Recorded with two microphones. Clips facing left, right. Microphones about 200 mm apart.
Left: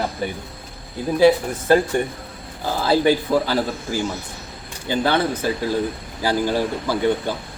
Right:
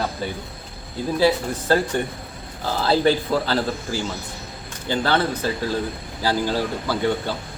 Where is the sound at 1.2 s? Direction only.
15° left (ahead or behind).